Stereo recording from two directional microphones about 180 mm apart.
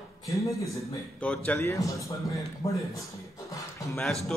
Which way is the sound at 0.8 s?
5° left (ahead or behind).